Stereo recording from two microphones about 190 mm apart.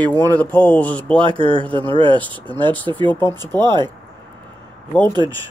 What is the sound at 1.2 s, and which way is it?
Speech, 25° right (ahead or behind).